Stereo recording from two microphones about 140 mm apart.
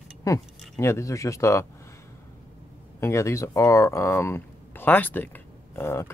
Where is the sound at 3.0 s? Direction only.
20° left (ahead or behind).